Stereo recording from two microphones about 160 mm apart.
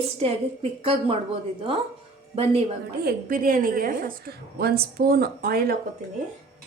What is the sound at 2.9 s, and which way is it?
A woman's voice, 80° right.